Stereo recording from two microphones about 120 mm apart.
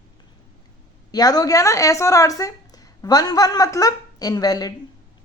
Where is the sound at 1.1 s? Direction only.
35° left (ahead or behind).